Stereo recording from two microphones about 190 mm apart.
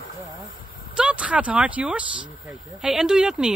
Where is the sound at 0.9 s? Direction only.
5° right (ahead or behind).